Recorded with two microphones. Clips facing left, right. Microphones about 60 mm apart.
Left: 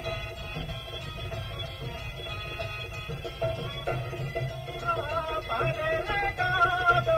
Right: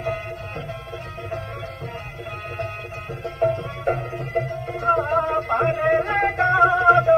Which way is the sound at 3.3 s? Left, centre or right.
Right.